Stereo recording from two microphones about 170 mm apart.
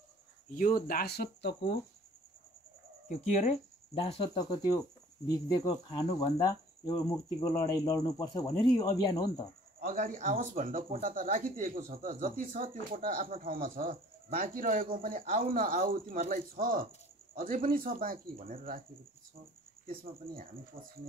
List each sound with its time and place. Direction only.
0.5 s speech: 55° left (ahead or behind); by 1.8 s 75° left (ahead or behind)
3.3 s speech: 40° left (ahead or behind)
4.4 s speech: 20° left (ahead or behind)
9.8 s speech: 50° right (ahead or behind)